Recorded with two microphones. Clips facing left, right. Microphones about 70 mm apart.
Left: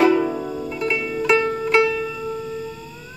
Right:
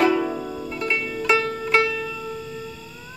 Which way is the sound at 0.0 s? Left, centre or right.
Centre.